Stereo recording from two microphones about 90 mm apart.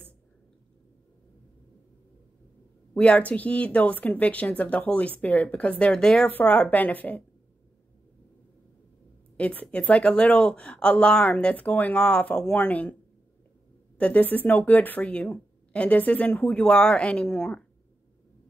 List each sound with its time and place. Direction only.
2.9 s speech: 15° left (ahead or behind)
9.4 s speech: 15° left (ahead or behind)
13.9 s speech: 15° left (ahead or behind)